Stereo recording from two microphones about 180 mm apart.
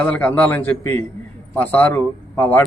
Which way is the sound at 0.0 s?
10° left (ahead or behind).